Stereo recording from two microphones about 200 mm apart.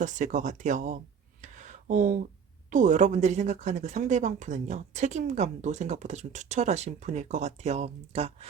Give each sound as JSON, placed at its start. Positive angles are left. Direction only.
{"t": 0.0, "sound": "speech", "side_deg": -40}
{"t": 1.4, "sound": "a sound", "side_deg": -35}
{"t": 2.6, "sound": "speech", "side_deg": -40}